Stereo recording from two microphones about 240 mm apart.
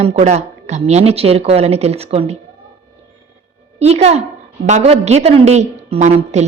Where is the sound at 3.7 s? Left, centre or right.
Right.